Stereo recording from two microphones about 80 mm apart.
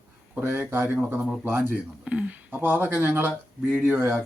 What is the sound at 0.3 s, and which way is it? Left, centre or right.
Speech, right.